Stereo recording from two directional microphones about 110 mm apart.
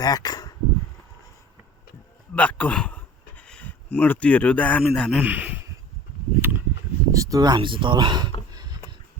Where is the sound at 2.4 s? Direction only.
15° left (ahead or behind).